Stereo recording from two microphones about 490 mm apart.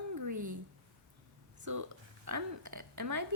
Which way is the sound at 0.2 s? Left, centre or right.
Right.